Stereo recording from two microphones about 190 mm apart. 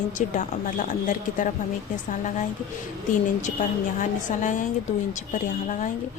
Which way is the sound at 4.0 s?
40° left (ahead or behind).